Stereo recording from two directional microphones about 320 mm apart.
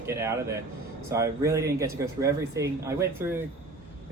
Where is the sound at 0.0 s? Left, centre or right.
Centre.